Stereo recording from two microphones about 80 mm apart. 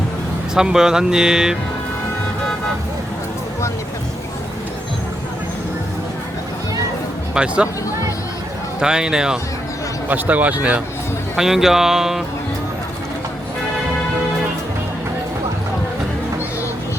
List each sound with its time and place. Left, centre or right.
0.5 s speech: centre
7.3 s speech: centre
8.8 s speech: centre
10.1 s speech: centre
11.3 s speech: centre